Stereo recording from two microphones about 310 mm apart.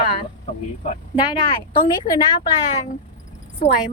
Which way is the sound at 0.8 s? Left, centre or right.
Centre.